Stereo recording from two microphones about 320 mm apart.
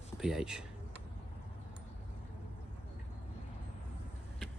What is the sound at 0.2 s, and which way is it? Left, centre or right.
Speech, centre.